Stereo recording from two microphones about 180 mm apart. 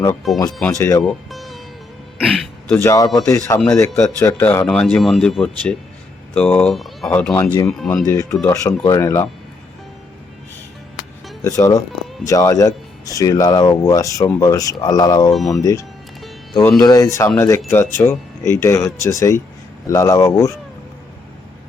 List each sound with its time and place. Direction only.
0.7 s speech: 15° left (ahead or behind)
1.0 s music: centre (ahead or behind)
2.1 s throat clearing: centre (ahead or behind)
2.7 s speech: 15° left (ahead or behind); by 8.0 s centre (ahead or behind)
8.4 s speech: 15° left (ahead or behind)
11.4 s speech: 15° left (ahead or behind)
15.3 s speech: centre (ahead or behind)
15.6 s speech: 20° left (ahead or behind)